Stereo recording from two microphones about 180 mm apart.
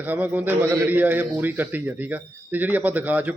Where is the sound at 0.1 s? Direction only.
10° right (ahead or behind).